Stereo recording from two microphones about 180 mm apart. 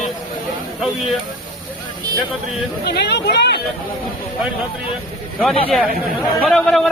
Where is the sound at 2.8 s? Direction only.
70° left (ahead or behind).